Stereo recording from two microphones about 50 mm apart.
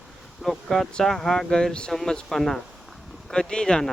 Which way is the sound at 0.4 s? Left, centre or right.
Centre.